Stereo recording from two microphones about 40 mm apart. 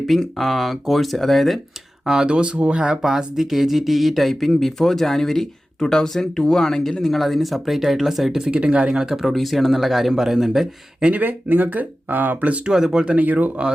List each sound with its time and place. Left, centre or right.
0.2 s speech: centre
2.0 s speech: right
3.0 s speech: centre
8.4 s speech: right
9.0 s speech: centre
9.2 s speech: centre
11.1 s speech: right
12.9 s speech: right
13.1 s speech: right